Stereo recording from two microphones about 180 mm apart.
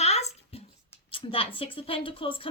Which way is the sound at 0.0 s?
35° left (ahead or behind).